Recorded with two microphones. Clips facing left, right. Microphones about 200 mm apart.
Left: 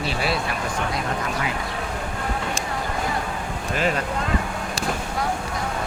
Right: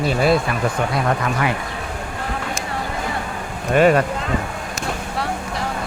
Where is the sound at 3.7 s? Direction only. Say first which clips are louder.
Right 10 dB; 60° right (ahead or behind).